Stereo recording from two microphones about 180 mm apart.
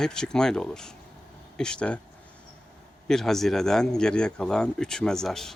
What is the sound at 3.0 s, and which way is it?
Speech, centre (ahead or behind).